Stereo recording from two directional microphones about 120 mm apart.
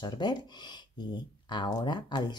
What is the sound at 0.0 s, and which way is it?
Speech, 40° left (ahead or behind).